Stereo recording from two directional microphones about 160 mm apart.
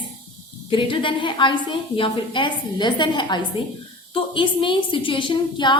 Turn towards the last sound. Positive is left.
turn(degrees=30)  # may be behind; listen again after turning